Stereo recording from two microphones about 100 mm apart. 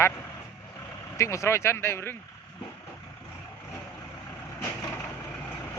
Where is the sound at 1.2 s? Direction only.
30° left (ahead or behind).